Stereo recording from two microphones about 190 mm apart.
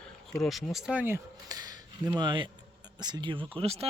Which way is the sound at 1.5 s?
20° right (ahead or behind).